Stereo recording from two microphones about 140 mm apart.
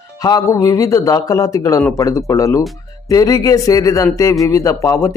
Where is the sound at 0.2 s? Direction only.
25° left (ahead or behind).